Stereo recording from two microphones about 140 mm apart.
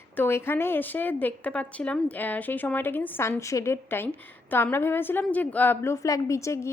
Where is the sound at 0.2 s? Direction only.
15° left (ahead or behind).